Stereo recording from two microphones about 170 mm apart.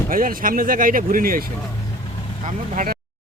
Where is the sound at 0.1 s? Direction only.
55° right (ahead or behind).